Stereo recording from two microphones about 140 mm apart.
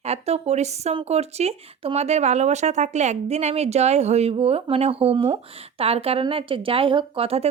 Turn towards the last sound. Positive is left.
turn(degrees=-45)  # may be behind; listen again after turning